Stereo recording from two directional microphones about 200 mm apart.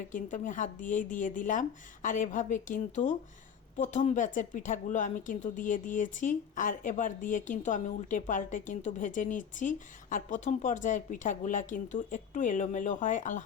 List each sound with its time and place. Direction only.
0.1 s speech: 40° left (ahead or behind)